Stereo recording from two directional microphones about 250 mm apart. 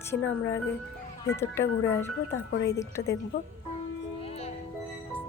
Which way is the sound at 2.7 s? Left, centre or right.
Centre.